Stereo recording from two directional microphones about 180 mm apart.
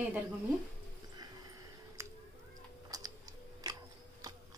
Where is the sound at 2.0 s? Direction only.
15° right (ahead or behind).